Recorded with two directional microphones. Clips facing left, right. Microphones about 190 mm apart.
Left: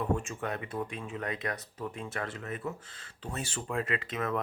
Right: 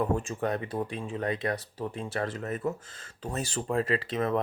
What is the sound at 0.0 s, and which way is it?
Speech, 35° right (ahead or behind).